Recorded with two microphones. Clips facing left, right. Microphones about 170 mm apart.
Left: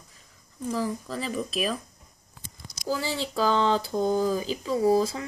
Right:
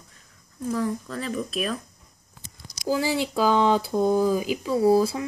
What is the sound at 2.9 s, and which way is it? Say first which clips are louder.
Speech: right 5 dB; 10° right (ahead or behind).